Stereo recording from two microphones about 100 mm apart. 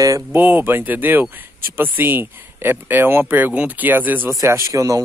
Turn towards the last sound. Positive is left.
turn(degrees=-35)  # may be behind; listen again after turning